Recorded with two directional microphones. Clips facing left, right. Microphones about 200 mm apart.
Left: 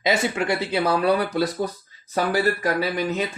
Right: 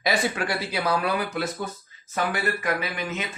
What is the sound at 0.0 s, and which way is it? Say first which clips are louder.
Speech: left 3 dB; 25° left (ahead or behind).